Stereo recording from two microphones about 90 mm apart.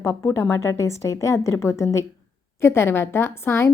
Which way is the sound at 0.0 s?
35° left (ahead or behind).